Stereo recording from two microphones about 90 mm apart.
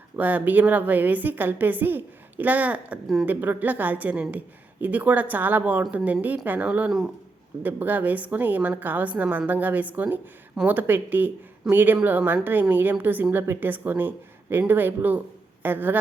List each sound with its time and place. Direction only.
0.2 s a woman's voice: 20° right (ahead or behind)